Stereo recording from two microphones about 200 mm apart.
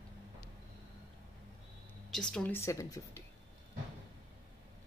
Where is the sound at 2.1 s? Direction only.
5° left (ahead or behind).